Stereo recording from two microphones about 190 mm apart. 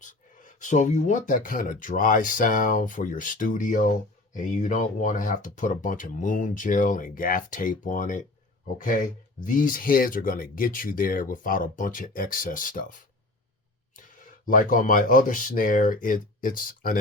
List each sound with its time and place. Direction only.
0.0 s speech: 40° left (ahead or behind)
14.4 s speech: 45° left (ahead or behind)